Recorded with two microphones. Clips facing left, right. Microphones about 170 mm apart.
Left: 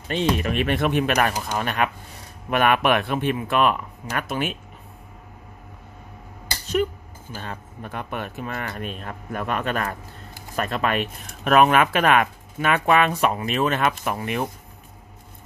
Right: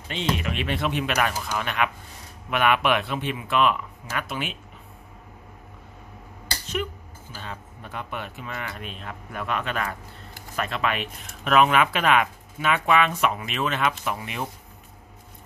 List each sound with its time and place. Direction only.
0.1 s speech: 45° left (ahead or behind)
7.3 s speech: 50° left (ahead or behind)